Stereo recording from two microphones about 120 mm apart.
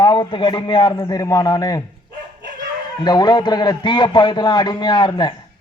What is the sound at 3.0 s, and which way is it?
A man's voice, 35° left (ahead or behind).